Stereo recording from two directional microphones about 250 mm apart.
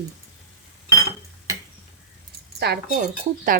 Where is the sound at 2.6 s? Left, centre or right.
Right.